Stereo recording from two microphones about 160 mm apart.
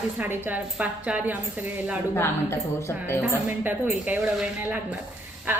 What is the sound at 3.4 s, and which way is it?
A woman's voice, 10° right (ahead or behind).